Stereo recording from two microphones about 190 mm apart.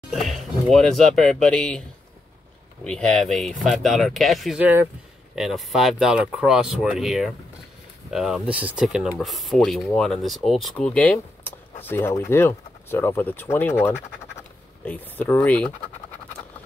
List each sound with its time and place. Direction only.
0.1 s speech: centre (ahead or behind)